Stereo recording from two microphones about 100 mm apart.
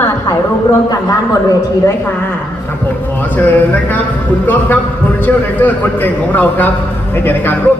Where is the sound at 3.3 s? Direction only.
15° left (ahead or behind).